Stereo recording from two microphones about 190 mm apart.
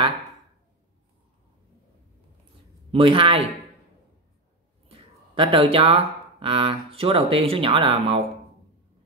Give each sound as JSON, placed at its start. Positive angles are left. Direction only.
{"t": 2.9, "sound": "speech", "side_deg": -30}
{"t": 4.8, "sound": "speech", "side_deg": -30}